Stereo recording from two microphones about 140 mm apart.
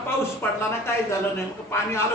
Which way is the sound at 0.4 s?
15° left (ahead or behind).